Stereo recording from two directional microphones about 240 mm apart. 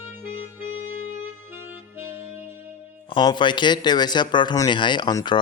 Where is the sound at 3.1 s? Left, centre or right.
Centre.